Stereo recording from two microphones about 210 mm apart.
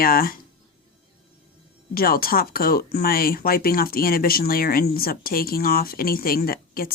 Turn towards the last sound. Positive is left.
turn(degrees=45)  # may be behind; listen again after turning